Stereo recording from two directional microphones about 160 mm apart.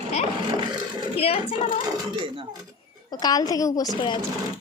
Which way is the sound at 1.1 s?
35° left (ahead or behind).